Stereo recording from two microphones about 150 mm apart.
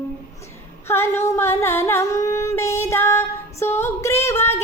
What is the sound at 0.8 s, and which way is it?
Singing, 15° left (ahead or behind).